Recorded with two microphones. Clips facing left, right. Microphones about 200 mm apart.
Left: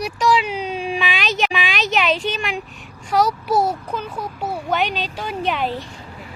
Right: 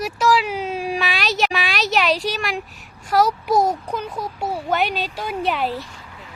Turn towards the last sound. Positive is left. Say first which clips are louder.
# even
turn(degrees=-5)  # may be behind; listen again after turning